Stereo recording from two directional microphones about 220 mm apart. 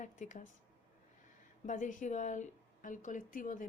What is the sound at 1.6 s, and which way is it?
Speech, 35° left (ahead or behind).